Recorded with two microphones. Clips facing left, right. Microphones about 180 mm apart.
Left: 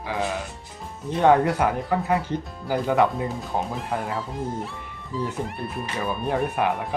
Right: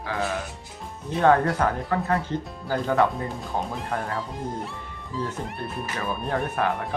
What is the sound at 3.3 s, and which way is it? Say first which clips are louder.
Speech: left 2 dB; 5° left (ahead or behind).